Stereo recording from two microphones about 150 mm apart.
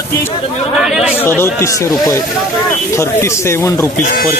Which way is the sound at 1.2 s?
15° left (ahead or behind).